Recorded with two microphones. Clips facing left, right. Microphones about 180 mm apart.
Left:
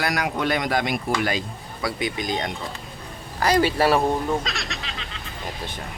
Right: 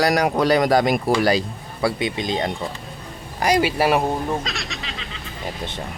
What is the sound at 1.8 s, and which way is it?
Speech, 25° right (ahead or behind).